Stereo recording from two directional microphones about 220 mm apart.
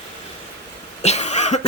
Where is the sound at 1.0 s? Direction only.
30° left (ahead or behind).